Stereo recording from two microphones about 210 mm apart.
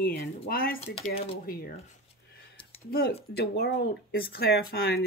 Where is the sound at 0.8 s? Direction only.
30° left (ahead or behind).